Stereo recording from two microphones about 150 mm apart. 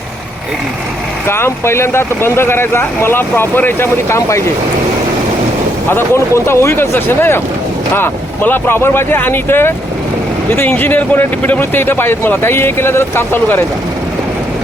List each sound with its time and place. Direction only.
1.3 s speech: 15° left (ahead or behind)
5.9 s speech: 15° left (ahead or behind)